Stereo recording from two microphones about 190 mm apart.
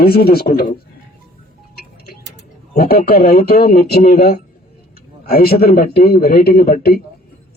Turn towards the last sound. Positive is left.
turn(degrees=55)  # may be behind; listen again after turning